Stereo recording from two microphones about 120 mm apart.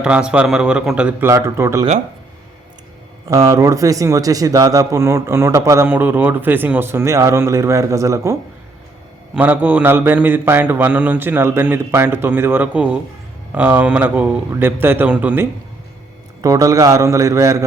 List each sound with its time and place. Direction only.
0.0 s a man's voice: 5° right (ahead or behind)
1.3 s a man's voice: 25° right (ahead or behind)
3.2 s a man's voice: 25° right (ahead or behind)
5.9 s a man's voice: 15° right (ahead or behind)
9.3 s a man's voice: 10° right (ahead or behind)
16.4 s a man's voice: 30° right (ahead or behind)